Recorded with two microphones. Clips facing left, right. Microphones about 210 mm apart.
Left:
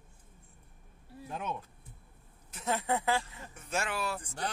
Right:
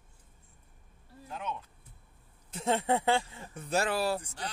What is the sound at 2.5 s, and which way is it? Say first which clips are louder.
Speech: right 4 dB; 25° right (ahead or behind).